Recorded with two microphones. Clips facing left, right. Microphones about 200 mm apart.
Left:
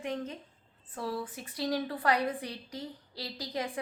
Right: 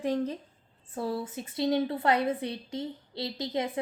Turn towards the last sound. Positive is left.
turn(degrees=-25)  # may be behind; listen again after turning